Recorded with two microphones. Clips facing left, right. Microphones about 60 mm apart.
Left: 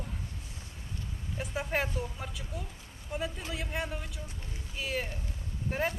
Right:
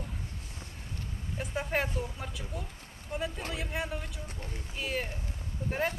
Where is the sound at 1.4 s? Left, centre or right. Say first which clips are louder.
Right 1 dB; centre.